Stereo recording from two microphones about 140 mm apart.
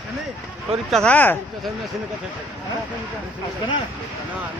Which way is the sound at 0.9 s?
5° left (ahead or behind).